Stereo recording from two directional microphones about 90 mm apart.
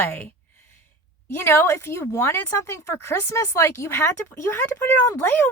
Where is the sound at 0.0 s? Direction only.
20° left (ahead or behind).